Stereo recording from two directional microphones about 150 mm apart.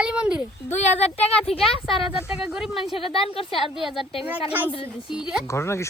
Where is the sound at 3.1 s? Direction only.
35° left (ahead or behind).